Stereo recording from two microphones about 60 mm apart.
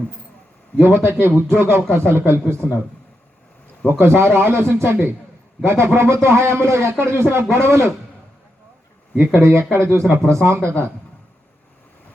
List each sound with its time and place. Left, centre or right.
0.8 s a man's voice: right
3.8 s a man's voice: right
9.1 s a man's voice: right